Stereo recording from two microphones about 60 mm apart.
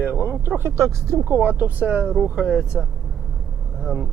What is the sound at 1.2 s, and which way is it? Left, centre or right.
Speech, right.